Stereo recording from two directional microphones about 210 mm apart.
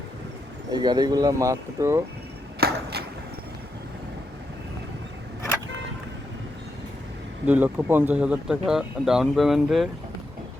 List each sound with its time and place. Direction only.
0.7 s speech: 20° right (ahead or behind)
2.6 s a sound: 45° right (ahead or behind)
7.4 s speech: 10° right (ahead or behind)